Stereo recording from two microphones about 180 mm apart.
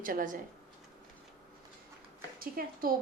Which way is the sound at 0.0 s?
50° right (ahead or behind).